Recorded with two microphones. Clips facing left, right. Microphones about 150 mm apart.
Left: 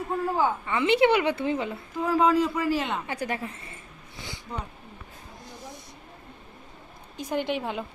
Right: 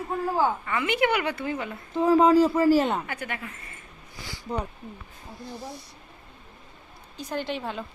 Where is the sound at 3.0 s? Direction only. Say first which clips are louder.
Left 4 dB; 35° left (ahead or behind).